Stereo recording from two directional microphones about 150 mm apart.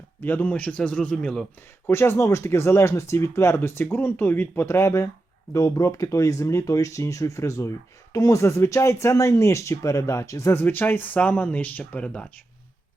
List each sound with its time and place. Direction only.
0.2 s speech: 15° left (ahead or behind)
1.9 s speech: 15° left (ahead or behind)